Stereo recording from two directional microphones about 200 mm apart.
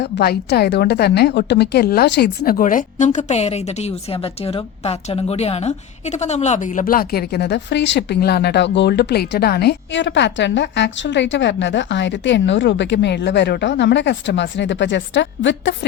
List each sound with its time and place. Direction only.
0.0 s a woman's voice: 50° left (ahead or behind)